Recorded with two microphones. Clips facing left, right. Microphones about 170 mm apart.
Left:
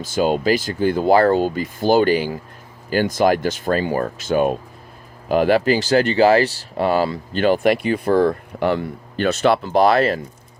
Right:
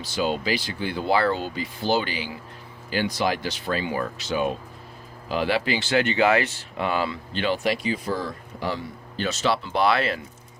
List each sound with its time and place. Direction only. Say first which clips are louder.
0.0 s speech: left 7 dB; 45° left (ahead or behind)